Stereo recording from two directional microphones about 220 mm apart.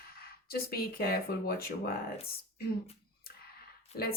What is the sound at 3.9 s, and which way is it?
Speech, 30° left (ahead or behind).